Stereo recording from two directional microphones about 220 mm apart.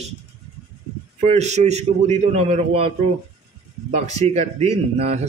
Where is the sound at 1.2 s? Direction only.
30° right (ahead or behind).